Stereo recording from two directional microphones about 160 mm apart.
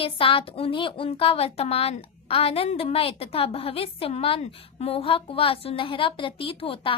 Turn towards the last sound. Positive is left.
turn(degrees=35)  # may be behind; listen again after turning